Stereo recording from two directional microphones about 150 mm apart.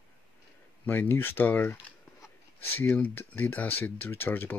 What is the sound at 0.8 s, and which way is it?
Speech, 15° left (ahead or behind).